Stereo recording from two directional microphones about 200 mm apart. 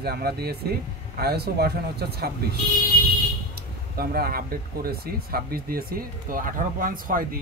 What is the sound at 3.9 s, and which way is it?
Speech, 50° right (ahead or behind).